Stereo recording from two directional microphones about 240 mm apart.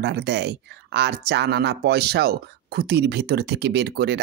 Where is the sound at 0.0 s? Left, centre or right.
Right.